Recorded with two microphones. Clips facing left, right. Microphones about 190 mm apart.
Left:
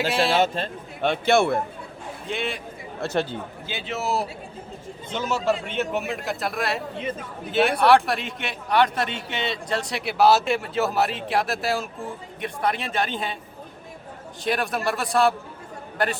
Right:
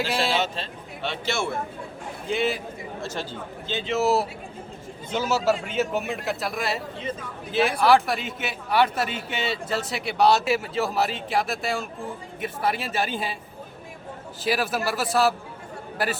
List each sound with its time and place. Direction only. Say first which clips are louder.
0.3 s speech: left 4 dB; 50° left (ahead or behind)
2.2 s a man's voice: right 4 dB; centre (ahead or behind)
3.0 s speech: left 8 dB; 65° left (ahead or behind)
3.7 s a man's voice: right 5 dB; 5° left (ahead or behind)
14.4 s a man's voice: even; 5° right (ahead or behind)